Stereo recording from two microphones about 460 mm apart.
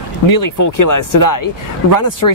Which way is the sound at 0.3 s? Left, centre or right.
Left.